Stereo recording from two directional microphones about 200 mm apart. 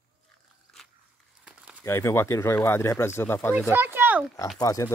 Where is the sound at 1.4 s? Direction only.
5° right (ahead or behind).